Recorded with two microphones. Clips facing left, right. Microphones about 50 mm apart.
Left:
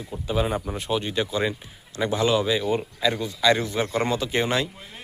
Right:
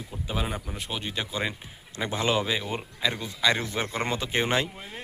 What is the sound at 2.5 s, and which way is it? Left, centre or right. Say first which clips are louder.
Speech: left 7 dB; centre.